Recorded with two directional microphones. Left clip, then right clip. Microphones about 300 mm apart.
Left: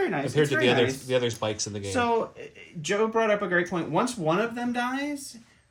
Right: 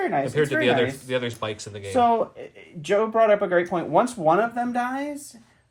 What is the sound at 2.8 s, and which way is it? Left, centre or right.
Speech, centre.